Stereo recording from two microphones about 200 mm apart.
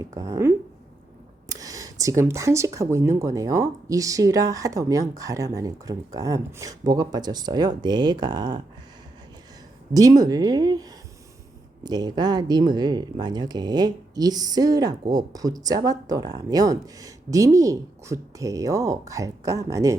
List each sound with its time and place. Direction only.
0.0 s speech: 15° right (ahead or behind)
9.9 s speech: 20° right (ahead or behind)